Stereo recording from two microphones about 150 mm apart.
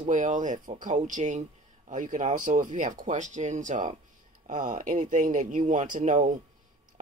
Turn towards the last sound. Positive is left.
turn(degrees=-55)  # may be behind; listen again after turning